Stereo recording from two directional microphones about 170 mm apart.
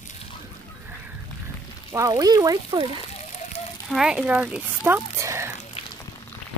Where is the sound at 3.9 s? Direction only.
5° right (ahead or behind).